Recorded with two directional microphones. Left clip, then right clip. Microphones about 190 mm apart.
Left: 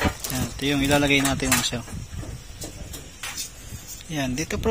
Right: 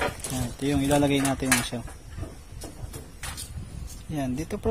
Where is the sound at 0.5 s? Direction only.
10° right (ahead or behind).